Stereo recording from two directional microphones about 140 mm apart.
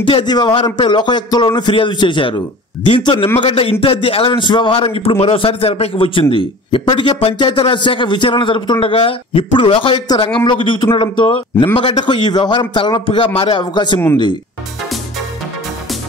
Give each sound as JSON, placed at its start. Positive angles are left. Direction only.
{"t": 0.0, "sound": "a man's voice", "side_deg": 35}